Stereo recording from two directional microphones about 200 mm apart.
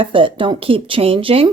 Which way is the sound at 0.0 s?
25° right (ahead or behind).